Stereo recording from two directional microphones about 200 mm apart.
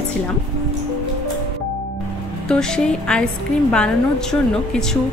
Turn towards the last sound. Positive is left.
turn(degrees=5)  # may be behind; listen again after turning